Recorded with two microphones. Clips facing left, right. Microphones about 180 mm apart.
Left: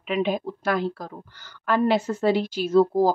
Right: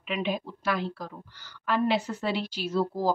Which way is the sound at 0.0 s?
45° left (ahead or behind).